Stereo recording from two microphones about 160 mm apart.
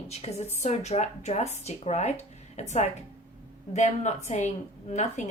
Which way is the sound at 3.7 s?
45° left (ahead or behind).